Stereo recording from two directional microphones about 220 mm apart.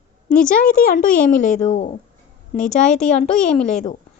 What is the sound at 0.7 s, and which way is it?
A woman's voice, 40° left (ahead or behind).